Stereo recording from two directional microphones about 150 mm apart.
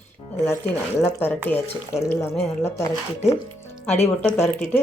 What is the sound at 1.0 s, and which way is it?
Speech, 15° left (ahead or behind).